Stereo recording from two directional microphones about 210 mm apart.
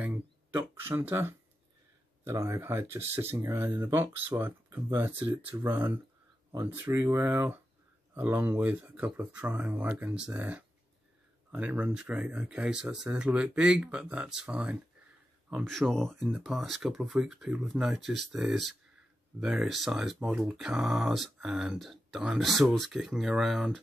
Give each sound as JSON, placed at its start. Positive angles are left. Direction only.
{"t": 0.0, "sound": "speech", "side_deg": -10}